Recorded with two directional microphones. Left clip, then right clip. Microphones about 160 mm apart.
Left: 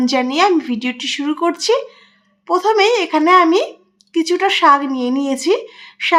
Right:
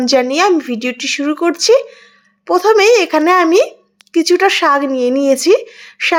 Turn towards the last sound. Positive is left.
turn(degrees=-30)  # may be behind; listen again after turning